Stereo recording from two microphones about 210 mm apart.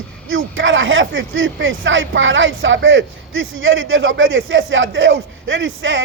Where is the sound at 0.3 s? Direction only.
65° right (ahead or behind).